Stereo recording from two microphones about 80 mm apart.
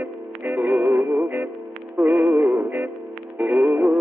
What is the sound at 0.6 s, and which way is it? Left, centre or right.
Music, centre.